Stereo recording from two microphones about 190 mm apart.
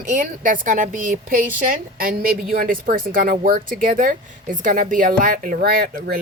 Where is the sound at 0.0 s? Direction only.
45° right (ahead or behind).